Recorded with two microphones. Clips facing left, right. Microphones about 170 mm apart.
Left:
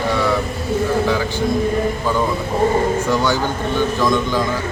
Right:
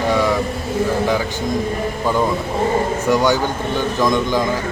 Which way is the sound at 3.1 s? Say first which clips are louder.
Right 2 dB; 15° right (ahead or behind).